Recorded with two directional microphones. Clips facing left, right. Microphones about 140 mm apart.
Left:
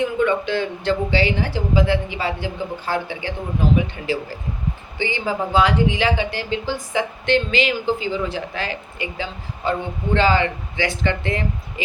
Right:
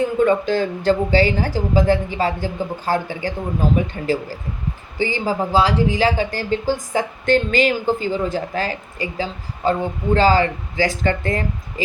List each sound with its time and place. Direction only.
0.0 s a man's voice: 40° right (ahead or behind)